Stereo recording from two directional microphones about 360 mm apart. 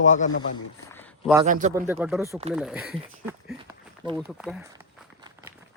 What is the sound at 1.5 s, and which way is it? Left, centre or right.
Speech, right.